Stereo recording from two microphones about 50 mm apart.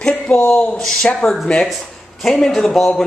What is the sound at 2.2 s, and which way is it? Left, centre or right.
Speech, centre.